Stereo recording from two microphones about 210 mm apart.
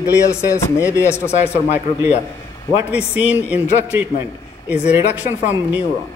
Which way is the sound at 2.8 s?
5° right (ahead or behind).